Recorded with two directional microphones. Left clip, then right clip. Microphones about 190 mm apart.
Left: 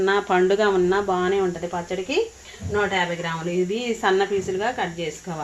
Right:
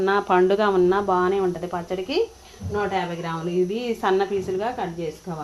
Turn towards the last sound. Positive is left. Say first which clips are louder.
# left 1 dB
turn(degrees=-15)  # may be behind; listen again after turning